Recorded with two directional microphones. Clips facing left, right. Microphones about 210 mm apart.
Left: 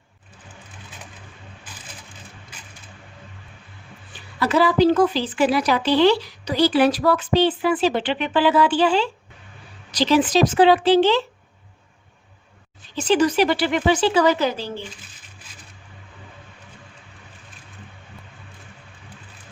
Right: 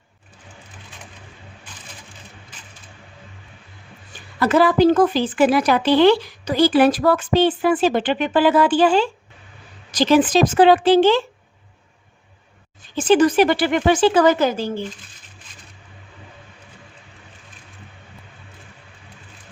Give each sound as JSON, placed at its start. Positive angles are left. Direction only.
{"t": 4.4, "sound": "a woman's voice", "side_deg": -50}
{"t": 13.0, "sound": "a woman's voice", "side_deg": -50}